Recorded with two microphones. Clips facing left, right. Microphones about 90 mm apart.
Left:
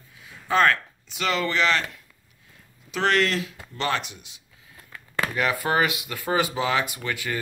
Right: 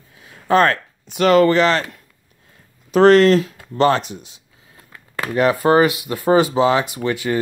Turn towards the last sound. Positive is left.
turn(degrees=-25)  # may be behind; listen again after turning